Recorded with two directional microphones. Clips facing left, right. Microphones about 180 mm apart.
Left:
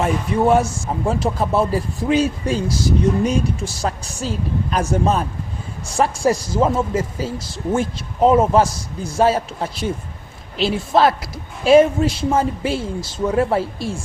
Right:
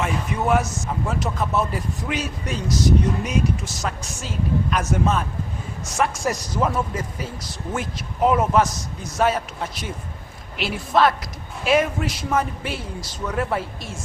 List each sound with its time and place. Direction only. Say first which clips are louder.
0.0 s speech: left 6 dB; 30° left (ahead or behind)